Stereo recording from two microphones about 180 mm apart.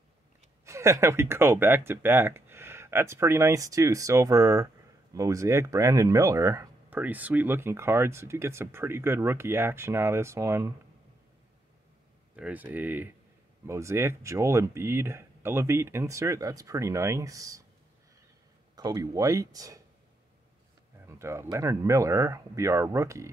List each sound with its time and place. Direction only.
0.7 s speech: 15° right (ahead or behind)
12.4 s speech: 10° right (ahead or behind)
18.8 s speech: 20° right (ahead or behind)
21.1 s speech: 15° right (ahead or behind)